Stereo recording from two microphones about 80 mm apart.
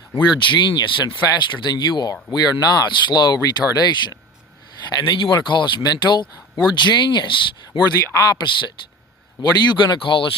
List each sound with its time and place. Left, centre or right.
0.1 s speech: left
4.9 s speech: left
8.1 s speech: left
8.4 s speech: left
9.4 s speech: left